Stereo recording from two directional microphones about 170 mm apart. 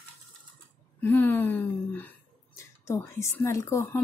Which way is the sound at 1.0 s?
10° left (ahead or behind).